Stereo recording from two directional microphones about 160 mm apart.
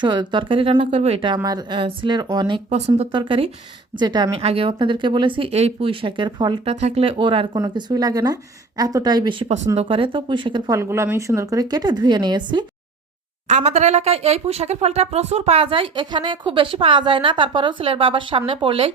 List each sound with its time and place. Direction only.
0.0 s speech: 30° right (ahead or behind)
1.4 s a woman's voice: 25° right (ahead or behind)
2.6 s speech: 40° right (ahead or behind)
6.7 s a woman's voice: 40° right (ahead or behind)
10.8 s a woman's voice: 15° right (ahead or behind)
13.5 s speech: 45° right (ahead or behind)